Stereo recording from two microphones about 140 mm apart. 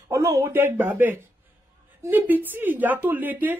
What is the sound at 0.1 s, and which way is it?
Speech, 20° right (ahead or behind).